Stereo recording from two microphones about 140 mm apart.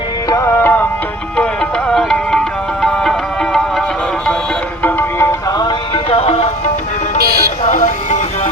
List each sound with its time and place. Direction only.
0.3 s tabla: 20° left (ahead or behind)
1.9 s music: 5° left (ahead or behind)
4.8 s music: 15° left (ahead or behind)
5.5 s music: 30° left (ahead or behind); by 6.5 s 45° left (ahead or behind)
7.6 s music: 65° left (ahead or behind)